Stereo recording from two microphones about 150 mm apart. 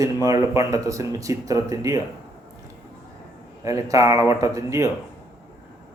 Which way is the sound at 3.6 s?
20° right (ahead or behind).